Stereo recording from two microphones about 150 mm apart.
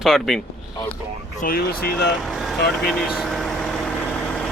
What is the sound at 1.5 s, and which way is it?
Speech, 90° left.